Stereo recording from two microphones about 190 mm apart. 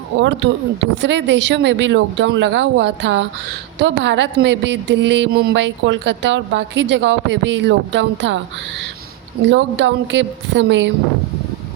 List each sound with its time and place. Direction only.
0.2 s speech: 75° right (ahead or behind)
9.5 s speech: 70° right (ahead or behind)